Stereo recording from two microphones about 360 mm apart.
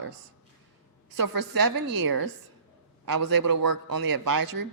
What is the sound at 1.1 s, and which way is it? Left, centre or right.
Speech, right.